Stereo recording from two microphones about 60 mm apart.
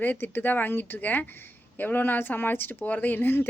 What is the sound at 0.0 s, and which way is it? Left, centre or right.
A woman's voice, left.